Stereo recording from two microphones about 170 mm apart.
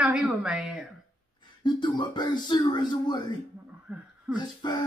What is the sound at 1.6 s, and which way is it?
A man's voice, 25° left (ahead or behind).